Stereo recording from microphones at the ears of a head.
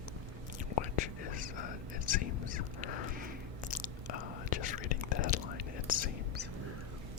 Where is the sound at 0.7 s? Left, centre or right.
Left.